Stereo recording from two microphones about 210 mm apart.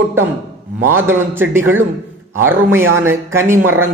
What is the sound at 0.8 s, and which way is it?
A man's voice, 10° right (ahead or behind).